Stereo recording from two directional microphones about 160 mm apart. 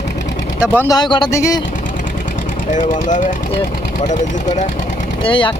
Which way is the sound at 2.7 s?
50° left (ahead or behind).